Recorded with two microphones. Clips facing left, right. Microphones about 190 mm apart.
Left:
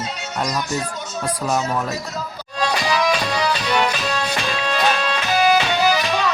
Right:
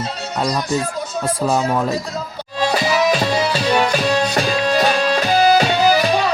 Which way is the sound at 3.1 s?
40° right (ahead or behind).